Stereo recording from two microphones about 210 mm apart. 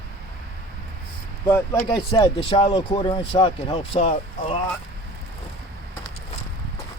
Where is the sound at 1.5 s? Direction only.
15° left (ahead or behind); by 4.6 s 30° left (ahead or behind).